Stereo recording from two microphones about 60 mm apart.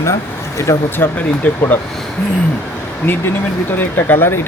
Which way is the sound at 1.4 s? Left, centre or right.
Left.